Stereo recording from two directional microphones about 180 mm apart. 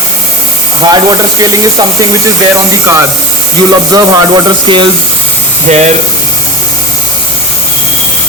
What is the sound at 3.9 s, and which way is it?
Speech, 25° right (ahead or behind).